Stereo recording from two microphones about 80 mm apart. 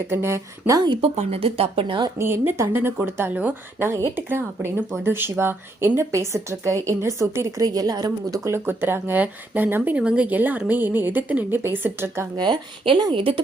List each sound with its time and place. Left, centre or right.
0.1 s speech: right
1.8 s a woman's voice: right
2.1 s a woman's voice: right
7.6 s a woman's voice: right
8.4 s a woman's voice: right
12.4 s a woman's voice: right